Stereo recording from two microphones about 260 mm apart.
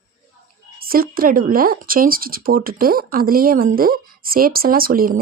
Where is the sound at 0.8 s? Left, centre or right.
Right.